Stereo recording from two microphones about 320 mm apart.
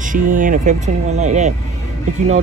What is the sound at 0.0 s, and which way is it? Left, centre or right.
Speech, right.